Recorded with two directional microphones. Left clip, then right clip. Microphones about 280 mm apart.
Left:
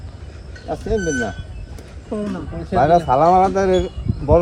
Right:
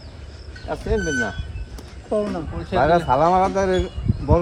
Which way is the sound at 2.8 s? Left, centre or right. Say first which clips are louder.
Left 3 dB; right.